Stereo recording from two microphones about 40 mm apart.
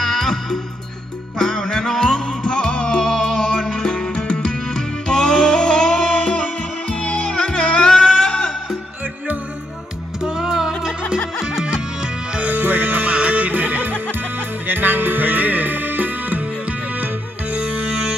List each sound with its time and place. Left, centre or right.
0.0 s music: centre
10.2 s music: centre
12.5 s music: right
17.5 s music: right